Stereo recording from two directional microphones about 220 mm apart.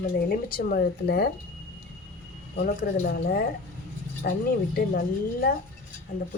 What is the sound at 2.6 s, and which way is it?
A woman's voice, 40° left (ahead or behind).